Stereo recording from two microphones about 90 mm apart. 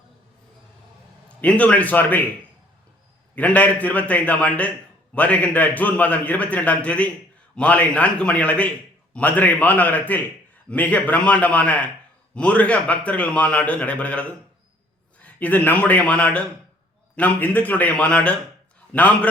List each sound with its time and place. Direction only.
1.4 s a man's voice: 15° left (ahead or behind)
3.3 s a man's voice: 15° left (ahead or behind)